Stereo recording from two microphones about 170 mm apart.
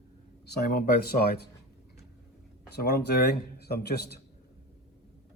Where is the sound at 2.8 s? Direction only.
70° left (ahead or behind).